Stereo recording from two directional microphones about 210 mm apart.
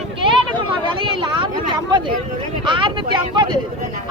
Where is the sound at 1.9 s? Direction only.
20° right (ahead or behind).